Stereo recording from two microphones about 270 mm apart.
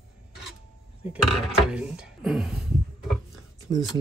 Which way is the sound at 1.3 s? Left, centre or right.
Centre.